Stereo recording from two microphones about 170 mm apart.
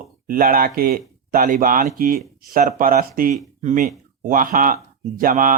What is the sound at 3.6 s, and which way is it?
Speech, 45° right (ahead or behind).